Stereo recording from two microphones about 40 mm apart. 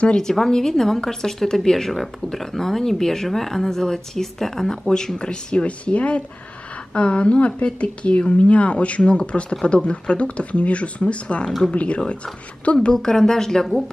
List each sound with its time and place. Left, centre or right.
0.2 s a woman's voice: centre; by 12.0 s left
12.8 s a woman's voice: centre